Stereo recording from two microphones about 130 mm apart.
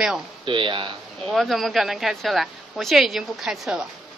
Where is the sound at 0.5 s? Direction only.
40° right (ahead or behind).